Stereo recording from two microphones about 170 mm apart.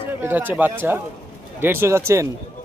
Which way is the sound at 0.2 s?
10° right (ahead or behind).